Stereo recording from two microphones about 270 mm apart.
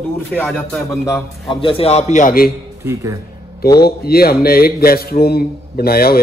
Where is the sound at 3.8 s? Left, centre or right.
Left.